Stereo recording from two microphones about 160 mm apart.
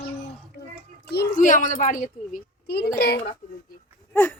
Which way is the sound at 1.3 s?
55° left (ahead or behind).